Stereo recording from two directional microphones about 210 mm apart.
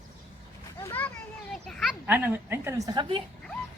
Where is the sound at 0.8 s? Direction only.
10° left (ahead or behind).